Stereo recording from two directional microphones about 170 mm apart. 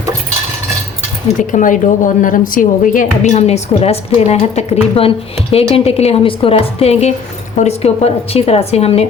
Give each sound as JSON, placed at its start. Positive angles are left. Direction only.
{"t": 1.4, "sound": "a woman's voice", "side_deg": 50}